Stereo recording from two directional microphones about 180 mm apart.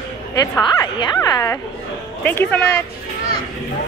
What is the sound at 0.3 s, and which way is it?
A woman's voice, 20° left (ahead or behind).